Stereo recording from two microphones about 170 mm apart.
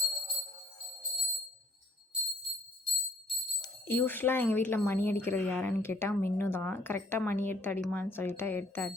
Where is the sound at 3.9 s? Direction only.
10° left (ahead or behind).